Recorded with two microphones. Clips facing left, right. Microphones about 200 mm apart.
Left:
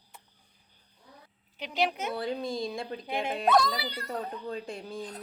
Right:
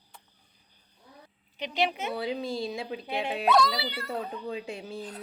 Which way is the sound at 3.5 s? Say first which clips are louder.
Right 1 dB; 50° left (ahead or behind).